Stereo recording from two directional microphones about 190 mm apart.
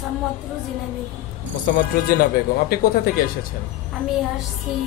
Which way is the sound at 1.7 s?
50° left (ahead or behind).